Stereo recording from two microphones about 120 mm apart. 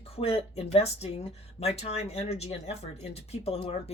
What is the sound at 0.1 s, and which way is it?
Speech, 60° left (ahead or behind).